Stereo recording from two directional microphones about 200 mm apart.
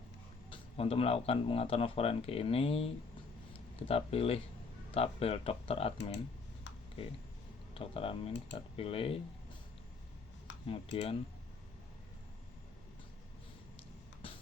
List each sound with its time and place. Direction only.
0.5 s speech: 30° left (ahead or behind)
7.7 s speech: 30° left (ahead or behind)
10.7 s speech: 30° left (ahead or behind)